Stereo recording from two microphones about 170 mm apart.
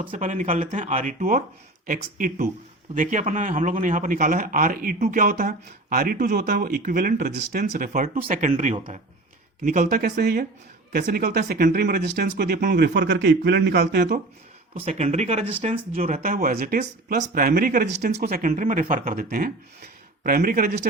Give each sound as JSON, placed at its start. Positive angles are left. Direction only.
{"t": 0.2, "sound": "speech", "side_deg": -50}
{"t": 14.8, "sound": "speech", "side_deg": -40}
{"t": 16.2, "sound": "speech", "side_deg": -55}